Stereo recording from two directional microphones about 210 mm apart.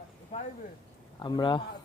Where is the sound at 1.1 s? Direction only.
20° left (ahead or behind).